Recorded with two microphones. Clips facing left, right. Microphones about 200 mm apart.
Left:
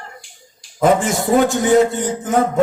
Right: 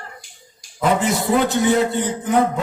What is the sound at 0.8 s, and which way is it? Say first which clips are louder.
A man's voice: left 3 dB; 45° left (ahead or behind).